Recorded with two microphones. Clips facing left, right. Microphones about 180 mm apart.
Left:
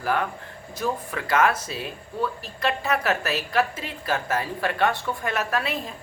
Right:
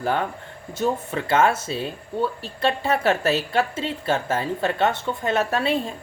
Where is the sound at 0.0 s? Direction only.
25° right (ahead or behind).